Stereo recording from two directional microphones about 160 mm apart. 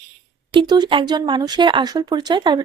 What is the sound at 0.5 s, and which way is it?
Speech, 30° right (ahead or behind).